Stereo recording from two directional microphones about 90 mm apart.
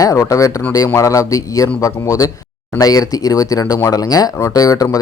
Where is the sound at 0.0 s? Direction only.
35° left (ahead or behind).